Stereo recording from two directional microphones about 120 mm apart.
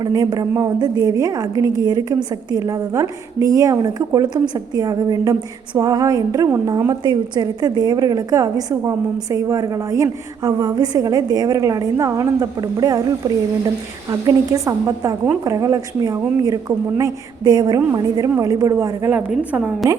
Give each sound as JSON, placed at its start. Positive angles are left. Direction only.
{"t": 0.0, "sound": "a woman's voice", "side_deg": -35}
{"t": 7.0, "sound": "a woman's voice", "side_deg": -40}
{"t": 19.1, "sound": "a woman's voice", "side_deg": -10}